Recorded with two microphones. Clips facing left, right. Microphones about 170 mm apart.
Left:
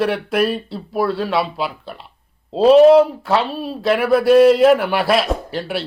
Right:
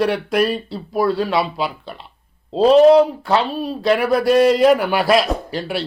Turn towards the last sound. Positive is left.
turn(degrees=0)  # may be behind; listen again after turning